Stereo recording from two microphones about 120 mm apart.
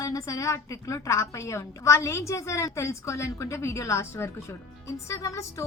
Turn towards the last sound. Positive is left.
turn(degrees=25)  # may be behind; listen again after turning